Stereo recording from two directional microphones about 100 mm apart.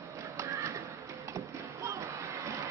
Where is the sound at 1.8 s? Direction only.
30° right (ahead or behind).